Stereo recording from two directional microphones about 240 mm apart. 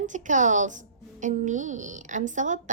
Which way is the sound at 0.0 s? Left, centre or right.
Right.